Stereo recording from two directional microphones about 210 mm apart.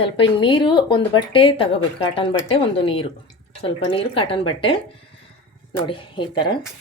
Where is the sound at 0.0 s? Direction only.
25° left (ahead or behind).